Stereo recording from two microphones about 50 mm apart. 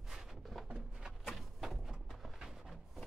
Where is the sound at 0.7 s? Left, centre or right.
Centre.